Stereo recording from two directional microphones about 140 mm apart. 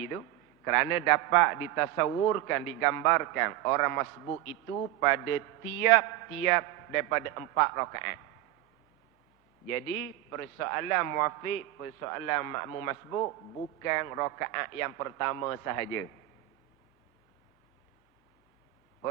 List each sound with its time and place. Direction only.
0.1 s a man's voice: 20° left (ahead or behind)
9.7 s a man's voice: 20° left (ahead or behind)